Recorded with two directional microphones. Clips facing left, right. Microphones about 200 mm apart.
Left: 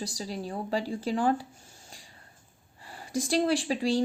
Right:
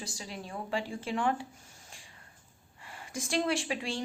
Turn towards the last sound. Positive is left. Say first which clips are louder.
# left 7 dB
turn(degrees=35)  # may be behind; listen again after turning